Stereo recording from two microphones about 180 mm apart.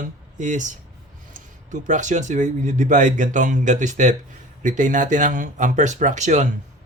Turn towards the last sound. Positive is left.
turn(degrees=-40)  # may be behind; listen again after turning